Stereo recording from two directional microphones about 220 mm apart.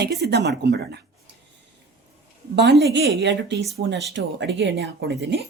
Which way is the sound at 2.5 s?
50° right (ahead or behind).